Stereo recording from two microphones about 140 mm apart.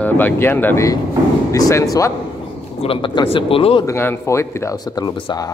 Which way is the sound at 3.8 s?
15° left (ahead or behind).